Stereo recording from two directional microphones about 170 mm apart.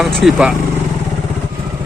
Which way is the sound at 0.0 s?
Centre (ahead or behind).